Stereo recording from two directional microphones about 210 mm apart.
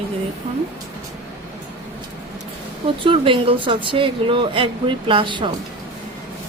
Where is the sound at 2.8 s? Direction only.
25° right (ahead or behind).